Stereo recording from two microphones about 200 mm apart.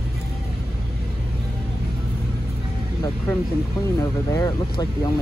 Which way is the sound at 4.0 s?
20° left (ahead or behind).